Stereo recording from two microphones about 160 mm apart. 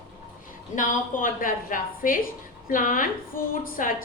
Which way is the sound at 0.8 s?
55° left (ahead or behind).